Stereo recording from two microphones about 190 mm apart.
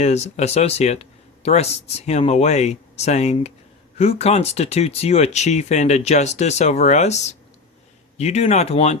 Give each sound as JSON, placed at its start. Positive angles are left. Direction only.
{"t": 0.0, "sound": "speech", "side_deg": 35}